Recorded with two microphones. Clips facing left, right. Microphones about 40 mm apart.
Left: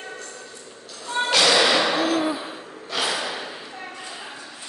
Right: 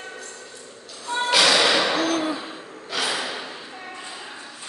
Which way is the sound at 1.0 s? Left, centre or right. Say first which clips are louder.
Even; centre.